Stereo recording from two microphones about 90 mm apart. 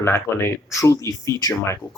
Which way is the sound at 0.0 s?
25° left (ahead or behind).